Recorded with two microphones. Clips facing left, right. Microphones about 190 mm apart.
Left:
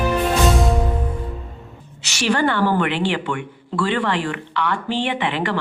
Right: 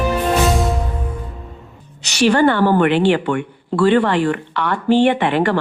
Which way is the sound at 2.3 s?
45° right (ahead or behind).